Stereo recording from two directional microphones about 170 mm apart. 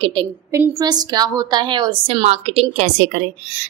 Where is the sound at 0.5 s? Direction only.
20° right (ahead or behind).